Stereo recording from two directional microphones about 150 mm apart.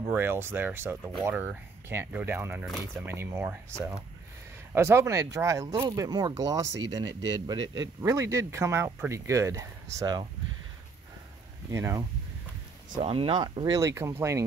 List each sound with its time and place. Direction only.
0.0 s speech: 15° right (ahead or behind)
4.7 s speech: 15° right (ahead or behind)
11.7 s speech: 20° right (ahead or behind)
13.0 s speech: 35° right (ahead or behind); by 14.4 s 20° right (ahead or behind)